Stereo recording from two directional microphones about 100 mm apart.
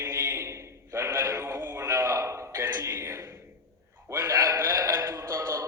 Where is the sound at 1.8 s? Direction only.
30° right (ahead or behind).